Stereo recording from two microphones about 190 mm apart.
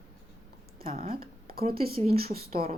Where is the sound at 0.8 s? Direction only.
50° right (ahead or behind).